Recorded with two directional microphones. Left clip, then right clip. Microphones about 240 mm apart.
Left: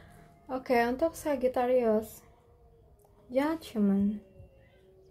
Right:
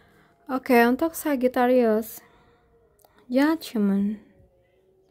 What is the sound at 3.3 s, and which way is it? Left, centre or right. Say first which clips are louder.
Speech: right 7 dB; right.